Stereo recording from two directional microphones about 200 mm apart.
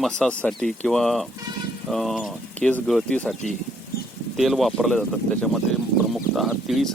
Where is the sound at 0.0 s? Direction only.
5° left (ahead or behind).